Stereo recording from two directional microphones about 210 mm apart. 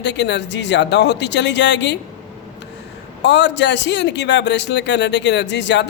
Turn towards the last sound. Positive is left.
turn(degrees=55)  # may be behind; listen again after turning